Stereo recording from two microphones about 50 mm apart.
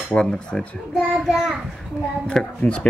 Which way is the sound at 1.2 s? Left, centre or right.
Centre.